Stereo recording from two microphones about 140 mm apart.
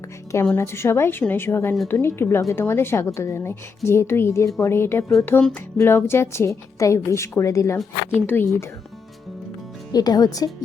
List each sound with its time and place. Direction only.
0.5 s a woman's voice: 15° left (ahead or behind)
9.9 s speech: 25° left (ahead or behind)